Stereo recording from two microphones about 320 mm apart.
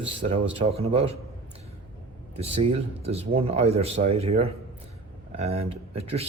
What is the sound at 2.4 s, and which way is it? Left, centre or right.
Speech, centre.